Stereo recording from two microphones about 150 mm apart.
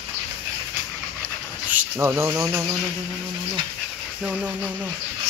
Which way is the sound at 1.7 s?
15° right (ahead or behind).